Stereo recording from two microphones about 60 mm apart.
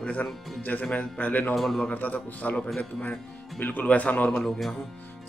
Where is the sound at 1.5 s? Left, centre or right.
Centre.